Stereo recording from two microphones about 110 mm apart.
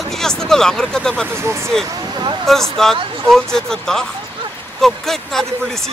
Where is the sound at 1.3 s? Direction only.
25° right (ahead or behind).